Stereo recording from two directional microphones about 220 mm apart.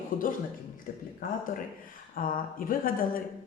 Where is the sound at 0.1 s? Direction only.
40° left (ahead or behind).